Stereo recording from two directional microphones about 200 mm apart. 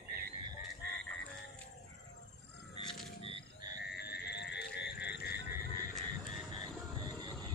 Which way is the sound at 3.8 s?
55° left (ahead or behind).